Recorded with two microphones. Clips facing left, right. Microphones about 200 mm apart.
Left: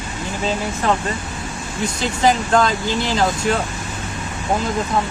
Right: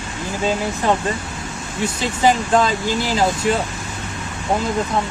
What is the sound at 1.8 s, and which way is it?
Speech, 5° right (ahead or behind).